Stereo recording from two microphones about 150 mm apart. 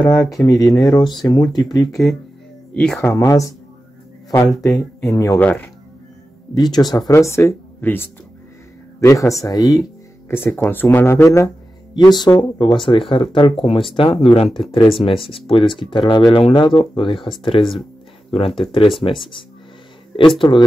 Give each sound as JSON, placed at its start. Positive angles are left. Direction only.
{"t": 0.0, "sound": "speech", "side_deg": 25}
{"t": 0.7, "sound": "speech", "side_deg": 0}
{"t": 0.9, "sound": "speech", "side_deg": 30}
{"t": 1.9, "sound": "speech", "side_deg": 0}
{"t": 3.2, "sound": "speech", "side_deg": 20}
{"t": 5.1, "sound": "speech", "side_deg": 20}
{"t": 5.4, "sound": "speech", "side_deg": 10}
{"t": 6.5, "sound": "speech", "side_deg": 25}
{"t": 9.4, "sound": "music", "side_deg": 25}
{"t": 10.3, "sound": "speech", "side_deg": 15}
{"t": 11.4, "sound": "music", "side_deg": 30}
{"t": 12.4, "sound": "speech", "side_deg": 30}
{"t": 20.3, "sound": "speech", "side_deg": 30}